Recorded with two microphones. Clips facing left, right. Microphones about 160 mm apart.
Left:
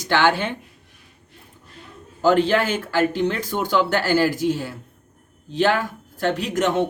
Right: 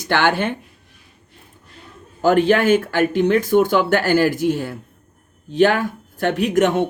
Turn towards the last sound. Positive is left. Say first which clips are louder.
# right 4 dB
turn(degrees=-50)  # may be behind; listen again after turning